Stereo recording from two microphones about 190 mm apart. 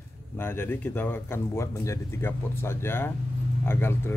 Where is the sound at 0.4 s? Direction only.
10° left (ahead or behind).